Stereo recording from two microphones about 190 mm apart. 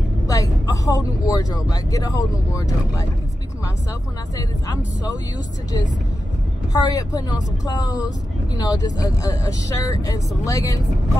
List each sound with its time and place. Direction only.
0.3 s speech: 20° left (ahead or behind)
4.4 s speech: 20° left (ahead or behind)
6.7 s speech: 20° left (ahead or behind)